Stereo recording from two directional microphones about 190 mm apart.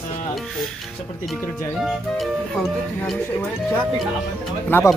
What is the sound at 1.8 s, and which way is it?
Speech, centre (ahead or behind).